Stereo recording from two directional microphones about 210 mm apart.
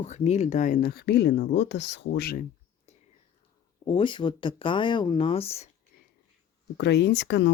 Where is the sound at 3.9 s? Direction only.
25° left (ahead or behind).